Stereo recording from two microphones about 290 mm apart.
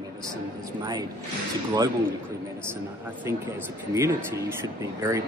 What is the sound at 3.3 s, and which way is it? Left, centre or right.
Speech, centre.